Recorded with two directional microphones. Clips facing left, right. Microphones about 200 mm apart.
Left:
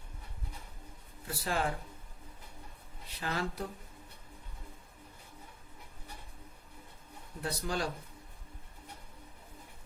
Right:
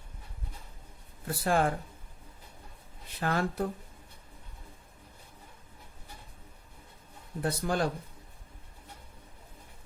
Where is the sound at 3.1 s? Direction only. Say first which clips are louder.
Right 6 dB; 50° right (ahead or behind).